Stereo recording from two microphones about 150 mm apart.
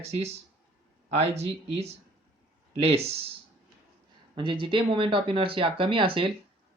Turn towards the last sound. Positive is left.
turn(degrees=-35)  # may be behind; listen again after turning